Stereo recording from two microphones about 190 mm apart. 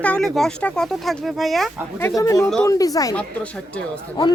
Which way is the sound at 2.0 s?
15° left (ahead or behind).